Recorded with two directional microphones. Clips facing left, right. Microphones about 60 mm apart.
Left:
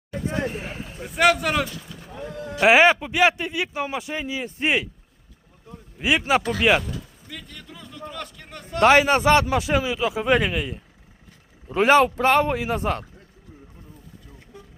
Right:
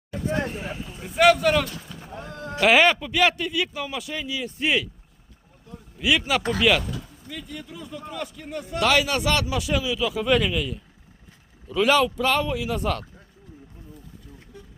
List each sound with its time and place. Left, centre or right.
0.5 s speech: left
1.0 s speech: centre
2.6 s a man's voice: centre
6.0 s a man's voice: left
7.3 s a man's voice: centre
8.8 s speech: left